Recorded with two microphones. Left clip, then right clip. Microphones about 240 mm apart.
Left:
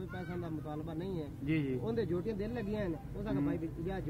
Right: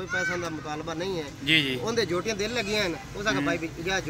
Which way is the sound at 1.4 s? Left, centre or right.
Centre.